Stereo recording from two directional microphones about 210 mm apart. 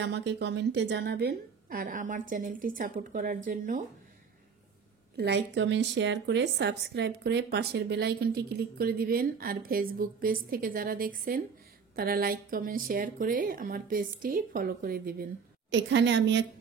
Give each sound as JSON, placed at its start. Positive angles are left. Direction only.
{"t": 0.0, "sound": "a woman's voice", "side_deg": -55}
{"t": 5.1, "sound": "a woman's voice", "side_deg": -55}
{"t": 15.7, "sound": "a woman's voice", "side_deg": -60}